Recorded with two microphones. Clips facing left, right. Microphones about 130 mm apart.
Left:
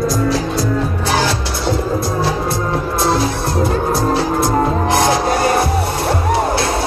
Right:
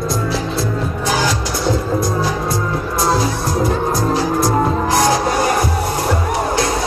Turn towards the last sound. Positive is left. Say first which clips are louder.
# left 1 dB
turn(degrees=25)  # may be behind; listen again after turning